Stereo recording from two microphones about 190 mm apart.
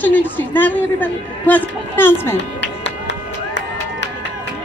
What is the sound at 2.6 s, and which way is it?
Music, 70° left (ahead or behind).